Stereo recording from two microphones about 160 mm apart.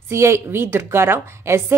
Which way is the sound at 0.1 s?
15° right (ahead or behind).